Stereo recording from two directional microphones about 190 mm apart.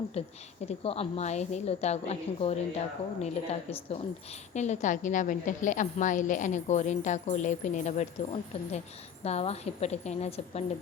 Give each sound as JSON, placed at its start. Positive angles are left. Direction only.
{"t": 0.1, "sound": "a woman's voice", "side_deg": 30}